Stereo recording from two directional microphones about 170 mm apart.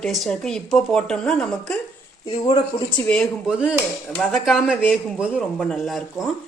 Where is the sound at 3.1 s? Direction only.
5° left (ahead or behind).